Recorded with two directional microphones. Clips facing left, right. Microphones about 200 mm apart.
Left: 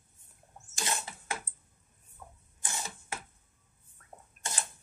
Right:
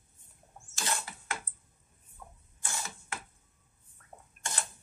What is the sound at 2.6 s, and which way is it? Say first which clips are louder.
Mechanisms: even; 20° left (ahead or behind).